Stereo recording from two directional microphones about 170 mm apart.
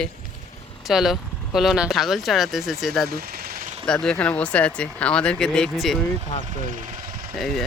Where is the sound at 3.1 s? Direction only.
65° right (ahead or behind).